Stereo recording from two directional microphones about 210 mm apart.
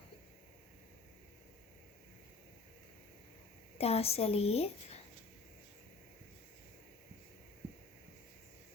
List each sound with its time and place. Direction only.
3.8 s a woman's voice: 30° left (ahead or behind)